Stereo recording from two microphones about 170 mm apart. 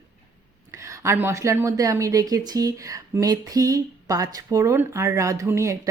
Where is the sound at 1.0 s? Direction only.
15° right (ahead or behind).